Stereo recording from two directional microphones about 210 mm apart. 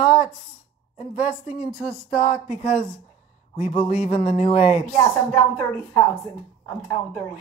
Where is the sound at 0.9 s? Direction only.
30° left (ahead or behind).